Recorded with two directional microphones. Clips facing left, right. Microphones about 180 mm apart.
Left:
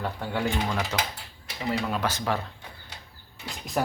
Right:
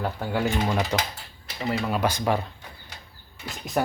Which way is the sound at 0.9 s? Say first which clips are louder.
Right 3 dB; 20° right (ahead or behind).